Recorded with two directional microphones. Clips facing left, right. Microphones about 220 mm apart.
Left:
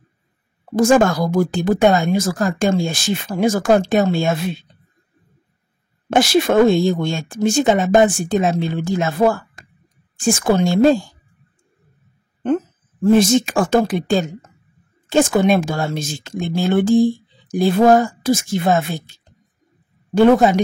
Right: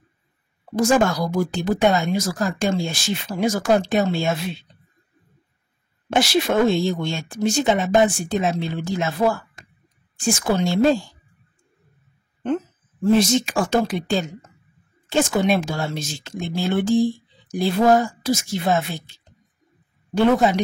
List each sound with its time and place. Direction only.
0.7 s speech: 50° left (ahead or behind)
6.0 s speech: 50° left (ahead or behind)
13.0 s speech: 50° left (ahead or behind)